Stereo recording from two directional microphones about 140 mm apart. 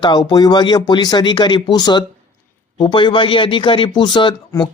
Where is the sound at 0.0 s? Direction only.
30° left (ahead or behind).